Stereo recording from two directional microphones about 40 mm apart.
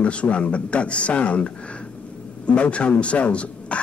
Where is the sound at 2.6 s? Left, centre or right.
Left.